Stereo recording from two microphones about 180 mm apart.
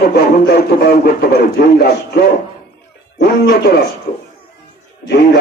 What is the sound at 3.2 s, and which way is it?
Speech, 65° left (ahead or behind).